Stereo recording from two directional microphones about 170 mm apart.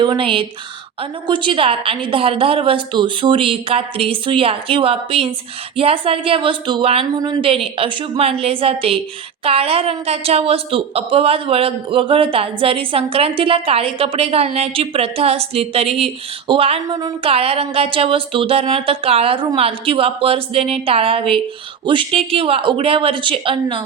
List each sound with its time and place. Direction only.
0.0 s a woman's voice: 30° right (ahead or behind)